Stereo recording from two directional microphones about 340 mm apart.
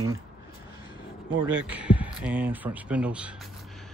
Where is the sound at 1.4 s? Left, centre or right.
Centre.